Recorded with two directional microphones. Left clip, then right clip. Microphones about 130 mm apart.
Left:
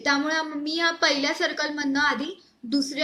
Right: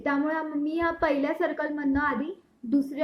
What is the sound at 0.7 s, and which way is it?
A woman's voice, 10° right (ahead or behind).